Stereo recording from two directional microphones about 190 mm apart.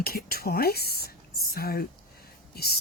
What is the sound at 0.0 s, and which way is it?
Speech, 55° left (ahead or behind).